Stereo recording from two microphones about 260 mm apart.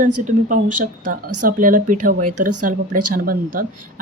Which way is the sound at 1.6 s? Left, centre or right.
Right.